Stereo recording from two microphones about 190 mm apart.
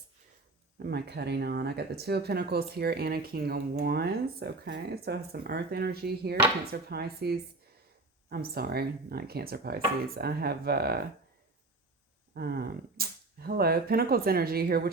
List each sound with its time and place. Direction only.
0.8 s speech: 60° right (ahead or behind)
12.3 s speech: 55° right (ahead or behind)